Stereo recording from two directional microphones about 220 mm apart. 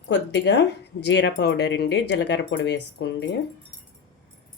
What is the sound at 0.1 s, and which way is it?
Speech, 50° left (ahead or behind).